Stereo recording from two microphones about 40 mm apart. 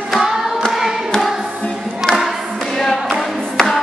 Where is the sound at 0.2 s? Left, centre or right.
Centre.